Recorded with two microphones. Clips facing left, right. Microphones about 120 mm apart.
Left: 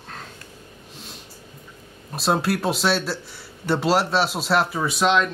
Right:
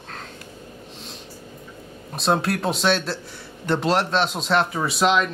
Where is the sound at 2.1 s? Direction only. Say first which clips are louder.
Even; 5° left (ahead or behind).